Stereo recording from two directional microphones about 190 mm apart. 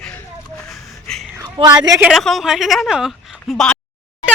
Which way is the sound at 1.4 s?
20° right (ahead or behind).